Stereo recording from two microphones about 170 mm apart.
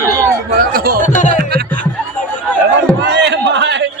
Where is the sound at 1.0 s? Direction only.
50° left (ahead or behind).